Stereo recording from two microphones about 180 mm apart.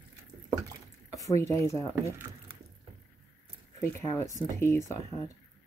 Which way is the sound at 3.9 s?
15° left (ahead or behind).